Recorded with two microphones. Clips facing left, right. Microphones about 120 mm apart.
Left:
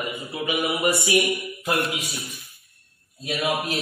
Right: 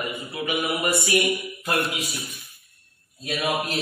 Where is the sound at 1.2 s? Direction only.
Centre (ahead or behind).